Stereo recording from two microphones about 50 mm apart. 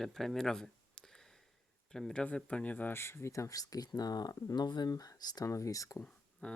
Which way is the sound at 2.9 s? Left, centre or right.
Left.